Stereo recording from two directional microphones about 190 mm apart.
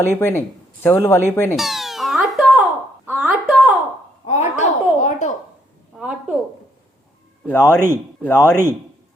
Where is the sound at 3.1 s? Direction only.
5° right (ahead or behind).